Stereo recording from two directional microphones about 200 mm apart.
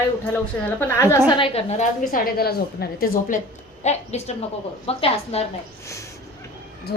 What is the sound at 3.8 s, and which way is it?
A woman's voice, 35° left (ahead or behind).